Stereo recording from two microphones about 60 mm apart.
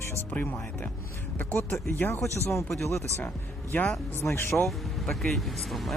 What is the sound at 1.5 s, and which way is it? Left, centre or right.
Speech, left.